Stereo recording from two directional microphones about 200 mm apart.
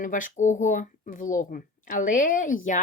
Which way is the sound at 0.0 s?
40° left (ahead or behind).